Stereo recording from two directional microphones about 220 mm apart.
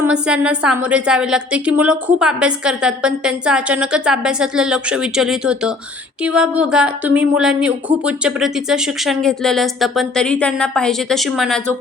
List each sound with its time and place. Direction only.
0.0 s a woman's voice: 5° right (ahead or behind)